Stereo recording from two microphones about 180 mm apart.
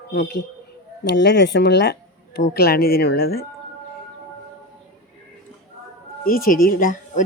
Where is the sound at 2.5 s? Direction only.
60° left (ahead or behind).